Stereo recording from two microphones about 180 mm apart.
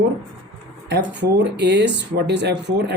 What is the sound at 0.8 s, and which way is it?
Speech, 70° right (ahead or behind).